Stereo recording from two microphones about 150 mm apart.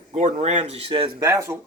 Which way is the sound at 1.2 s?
20° right (ahead or behind).